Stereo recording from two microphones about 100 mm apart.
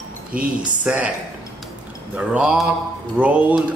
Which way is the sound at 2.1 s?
10° right (ahead or behind).